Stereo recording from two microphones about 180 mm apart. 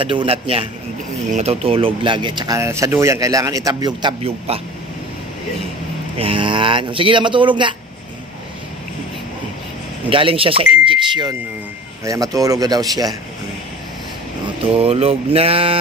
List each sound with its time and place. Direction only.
0.0 s mantra: 30° right (ahead or behind)
1.3 s speech: 35° right (ahead or behind)
6.1 s speech: 30° right (ahead or behind)
10.0 s speech: 30° right (ahead or behind)
14.7 s mantra: 35° right (ahead or behind)